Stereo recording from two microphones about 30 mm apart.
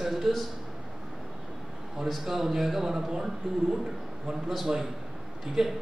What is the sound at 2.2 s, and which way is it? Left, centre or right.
Speech, centre.